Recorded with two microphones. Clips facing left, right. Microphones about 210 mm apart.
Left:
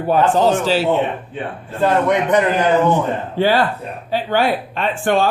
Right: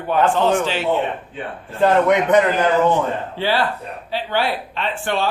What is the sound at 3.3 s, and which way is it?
Speech, 45° left (ahead or behind).